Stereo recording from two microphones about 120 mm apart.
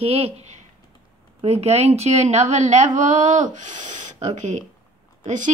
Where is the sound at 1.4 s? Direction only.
60° right (ahead or behind).